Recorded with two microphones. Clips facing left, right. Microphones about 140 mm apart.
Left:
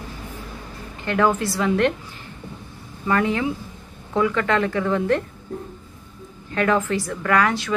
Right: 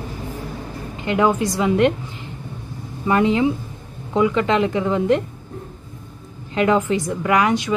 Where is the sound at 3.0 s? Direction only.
20° right (ahead or behind).